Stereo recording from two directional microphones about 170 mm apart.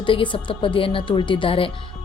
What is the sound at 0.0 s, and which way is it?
Speech, 30° left (ahead or behind).